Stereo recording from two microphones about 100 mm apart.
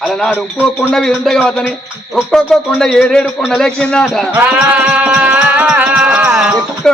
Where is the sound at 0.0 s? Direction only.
5° left (ahead or behind).